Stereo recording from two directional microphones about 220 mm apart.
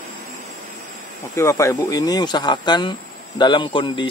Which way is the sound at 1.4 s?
15° left (ahead or behind).